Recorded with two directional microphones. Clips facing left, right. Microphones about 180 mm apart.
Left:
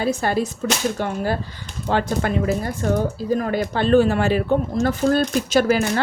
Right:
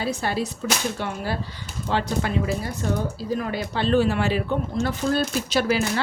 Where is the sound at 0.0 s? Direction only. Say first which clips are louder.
Left 5 dB; 50° left (ahead or behind).